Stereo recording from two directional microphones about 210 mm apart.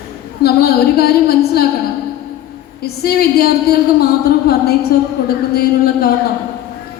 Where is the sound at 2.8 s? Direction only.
50° left (ahead or behind).